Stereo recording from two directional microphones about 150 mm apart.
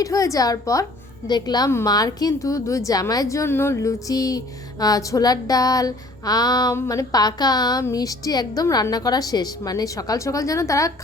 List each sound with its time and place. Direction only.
0.0 s female singing: 20° left (ahead or behind)